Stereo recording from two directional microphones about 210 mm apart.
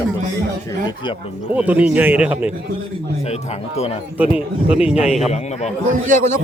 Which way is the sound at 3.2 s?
30° left (ahead or behind).